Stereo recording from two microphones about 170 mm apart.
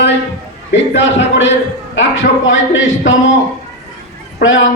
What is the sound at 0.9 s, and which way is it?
A man's voice, 90° left.